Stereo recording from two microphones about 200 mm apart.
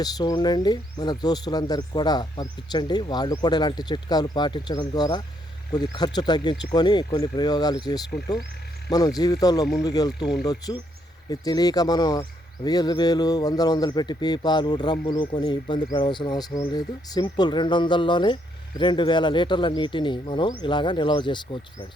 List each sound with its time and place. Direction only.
0.0 s speech: 20° left (ahead or behind)
8.9 s speech: 20° left (ahead or behind)